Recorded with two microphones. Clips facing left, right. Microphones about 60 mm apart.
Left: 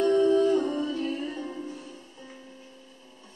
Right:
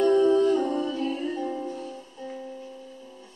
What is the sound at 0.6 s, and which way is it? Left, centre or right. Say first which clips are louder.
Music: right 1 dB; centre.